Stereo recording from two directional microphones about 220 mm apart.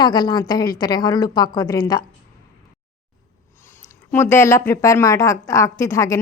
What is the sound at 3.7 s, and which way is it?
Speech, 10° left (ahead or behind).